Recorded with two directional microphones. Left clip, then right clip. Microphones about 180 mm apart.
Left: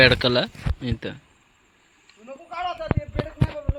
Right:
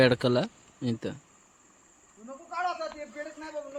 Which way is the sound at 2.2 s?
30° left (ahead or behind).